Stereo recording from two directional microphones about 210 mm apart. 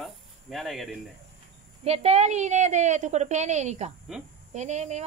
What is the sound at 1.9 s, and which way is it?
A woman's voice, 30° right (ahead or behind).